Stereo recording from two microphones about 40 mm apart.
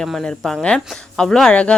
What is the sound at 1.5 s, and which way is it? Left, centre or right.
Speech, left.